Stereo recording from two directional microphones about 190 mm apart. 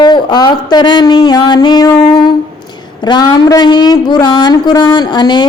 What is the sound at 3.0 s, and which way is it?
A woman's voice, 20° left (ahead or behind).